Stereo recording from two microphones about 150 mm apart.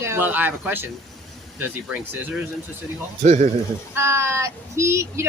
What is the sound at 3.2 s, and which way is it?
Speech, 50° right (ahead or behind).